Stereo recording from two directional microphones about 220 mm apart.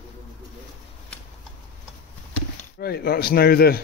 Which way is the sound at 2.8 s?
45° left (ahead or behind).